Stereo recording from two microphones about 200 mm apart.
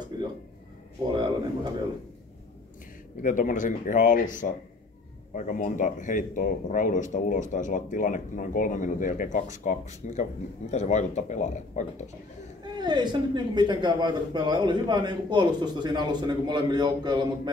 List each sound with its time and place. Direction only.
1.1 s speech: 25° right (ahead or behind)
3.2 s speech: 40° left (ahead or behind)
12.7 s a man's voice: 20° right (ahead or behind)